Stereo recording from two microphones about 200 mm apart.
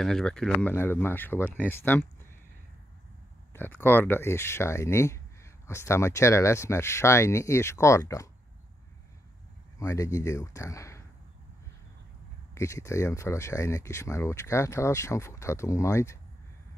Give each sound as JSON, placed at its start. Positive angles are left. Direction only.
{"t": 0.0, "sound": "speech", "side_deg": 0}
{"t": 3.5, "sound": "speech", "side_deg": 10}
{"t": 9.8, "sound": "speech", "side_deg": 15}
{"t": 12.5, "sound": "speech", "side_deg": 15}